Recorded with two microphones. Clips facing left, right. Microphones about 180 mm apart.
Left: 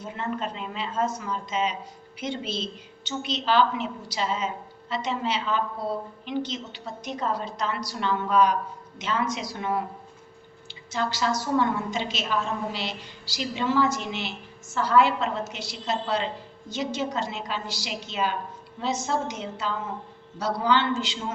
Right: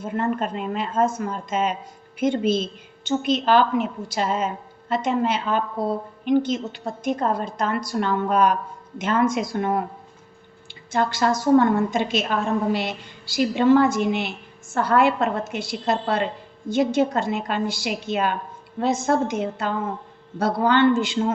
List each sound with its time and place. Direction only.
0.0 s a woman's voice: 50° right (ahead or behind)
10.9 s a woman's voice: 55° right (ahead or behind)